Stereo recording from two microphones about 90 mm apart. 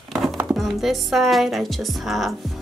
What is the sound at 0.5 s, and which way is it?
Speech, centre (ahead or behind).